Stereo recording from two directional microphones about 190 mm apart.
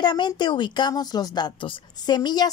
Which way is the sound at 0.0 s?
25° left (ahead or behind).